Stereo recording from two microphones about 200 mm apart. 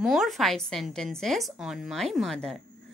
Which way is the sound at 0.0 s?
Centre (ahead or behind).